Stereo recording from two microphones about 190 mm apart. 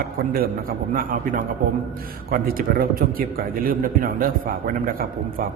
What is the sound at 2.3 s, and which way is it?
A man's voice, 50° right (ahead or behind).